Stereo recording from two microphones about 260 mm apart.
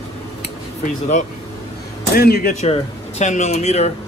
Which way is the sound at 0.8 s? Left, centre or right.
Left.